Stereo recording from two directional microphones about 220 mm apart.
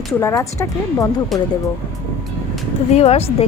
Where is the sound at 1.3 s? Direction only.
Centre (ahead or behind).